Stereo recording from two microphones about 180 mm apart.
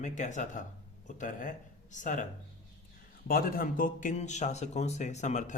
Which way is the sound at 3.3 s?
55° left (ahead or behind).